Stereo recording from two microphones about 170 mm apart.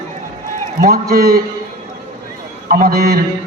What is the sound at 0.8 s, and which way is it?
Speech, 65° right (ahead or behind).